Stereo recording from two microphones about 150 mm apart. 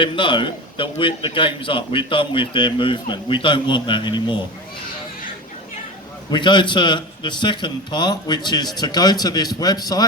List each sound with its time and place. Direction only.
0.0 s a man's voice: 35° left (ahead or behind)
6.3 s a man's voice: 30° left (ahead or behind)